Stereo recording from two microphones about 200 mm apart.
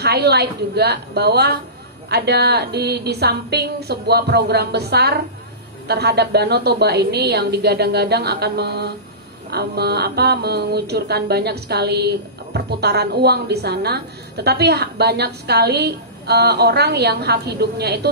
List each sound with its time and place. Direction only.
0.0 s a woman's voice: 55° right (ahead or behind)
2.0 s mantra: 55° right (ahead or behind)